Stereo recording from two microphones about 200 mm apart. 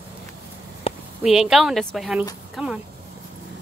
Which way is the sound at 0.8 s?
30° left (ahead or behind).